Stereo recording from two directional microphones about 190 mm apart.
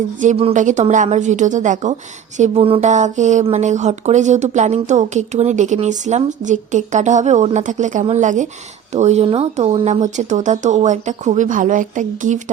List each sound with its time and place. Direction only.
0.2 s speech: 35° right (ahead or behind)
2.4 s speech: 30° right (ahead or behind)